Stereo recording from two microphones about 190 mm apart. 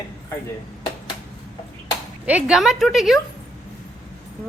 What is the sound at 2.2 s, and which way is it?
Speech, 5° right (ahead or behind).